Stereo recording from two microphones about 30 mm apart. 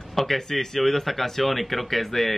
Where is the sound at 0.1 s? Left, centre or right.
Centre.